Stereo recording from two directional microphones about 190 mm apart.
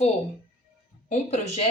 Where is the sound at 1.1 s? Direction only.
35° left (ahead or behind).